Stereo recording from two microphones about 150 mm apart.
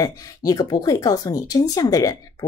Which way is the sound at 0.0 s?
25° left (ahead or behind).